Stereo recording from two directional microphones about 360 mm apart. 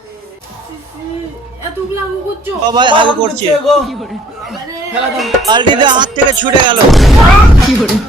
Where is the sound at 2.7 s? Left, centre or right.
Centre.